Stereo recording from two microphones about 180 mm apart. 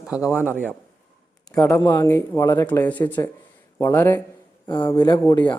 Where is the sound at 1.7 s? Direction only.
20° left (ahead or behind).